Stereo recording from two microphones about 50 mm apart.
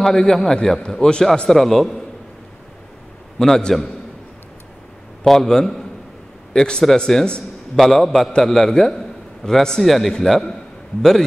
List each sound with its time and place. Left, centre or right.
0.0 s a man's voice: centre
1.5 s a man's voice: centre
3.3 s a man's voice: centre
5.2 s a man's voice: centre